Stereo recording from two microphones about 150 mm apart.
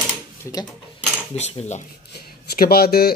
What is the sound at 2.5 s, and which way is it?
Speech, 90° left.